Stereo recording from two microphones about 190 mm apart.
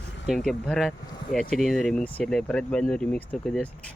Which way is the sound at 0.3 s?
Centre (ahead or behind).